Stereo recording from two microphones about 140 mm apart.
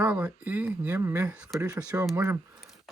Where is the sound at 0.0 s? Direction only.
10° right (ahead or behind).